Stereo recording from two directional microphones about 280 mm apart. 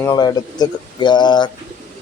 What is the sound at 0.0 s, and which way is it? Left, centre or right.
A man's voice, centre.